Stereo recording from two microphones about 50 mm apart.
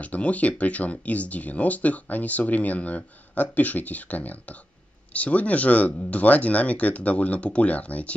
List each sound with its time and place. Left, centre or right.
0.0 s speech: left